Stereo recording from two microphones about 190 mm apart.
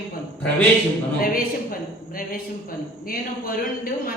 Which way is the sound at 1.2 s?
50° left (ahead or behind).